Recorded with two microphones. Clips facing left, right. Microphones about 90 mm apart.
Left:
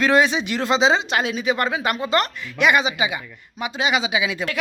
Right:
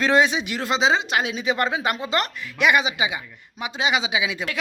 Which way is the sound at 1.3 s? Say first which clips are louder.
Left 1 dB; 25° right (ahead or behind).